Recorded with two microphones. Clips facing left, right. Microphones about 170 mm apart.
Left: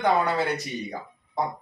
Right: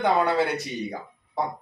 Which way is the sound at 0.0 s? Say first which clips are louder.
Right 1 dB; centre (ahead or behind).